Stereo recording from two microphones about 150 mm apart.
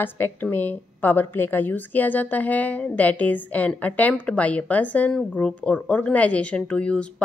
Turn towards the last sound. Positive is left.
turn(degrees=5)  # may be behind; listen again after turning